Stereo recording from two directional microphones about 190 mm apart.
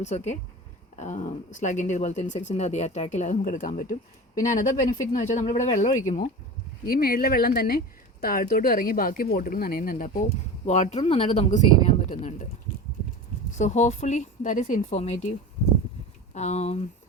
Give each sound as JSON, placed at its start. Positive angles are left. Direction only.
{"t": 0.0, "sound": "speech", "side_deg": 40}
{"t": 6.8, "sound": "speech", "side_deg": 50}
{"t": 13.6, "sound": "speech", "side_deg": 40}